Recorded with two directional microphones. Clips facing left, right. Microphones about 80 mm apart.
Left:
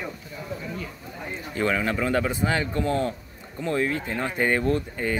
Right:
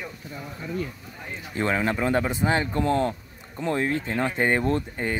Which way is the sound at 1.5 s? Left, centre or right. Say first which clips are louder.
Even; right.